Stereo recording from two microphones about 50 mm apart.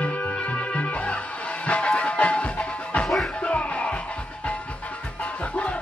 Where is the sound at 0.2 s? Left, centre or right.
Left.